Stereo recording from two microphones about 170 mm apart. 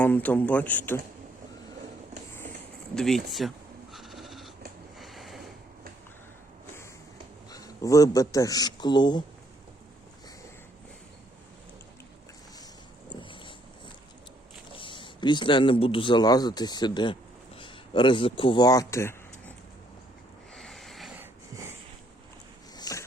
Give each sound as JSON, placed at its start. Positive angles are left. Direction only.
{"t": 0.0, "sound": "a man's voice", "side_deg": 10}
{"t": 2.9, "sound": "speech", "side_deg": 5}
{"t": 3.9, "sound": "goat", "side_deg": 0}
{"t": 4.9, "sound": "sniff", "side_deg": 0}
{"t": 7.5, "sound": "speech", "side_deg": 20}
{"t": 13.1, "sound": "dog", "side_deg": 30}
{"t": 14.8, "sound": "speech", "side_deg": 30}
{"t": 20.6, "sound": "a sound", "side_deg": 0}
{"t": 21.2, "sound": "wheeze", "side_deg": -15}
{"t": 22.8, "sound": "a sound", "side_deg": 20}